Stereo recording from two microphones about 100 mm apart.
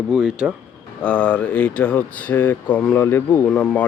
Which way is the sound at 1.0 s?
10° left (ahead or behind).